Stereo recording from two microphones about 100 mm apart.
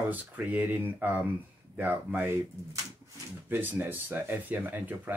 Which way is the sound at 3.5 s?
20° right (ahead or behind).